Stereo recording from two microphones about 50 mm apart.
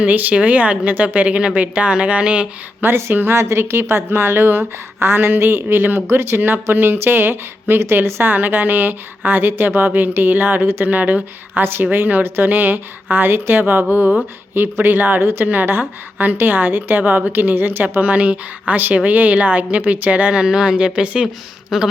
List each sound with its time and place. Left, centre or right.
0.0 s a woman's voice: right
2.8 s a woman's voice: right
11.6 s a woman's voice: right
11.9 s a woman's voice: right
18.0 s a woman's voice: right
21.7 s speech: centre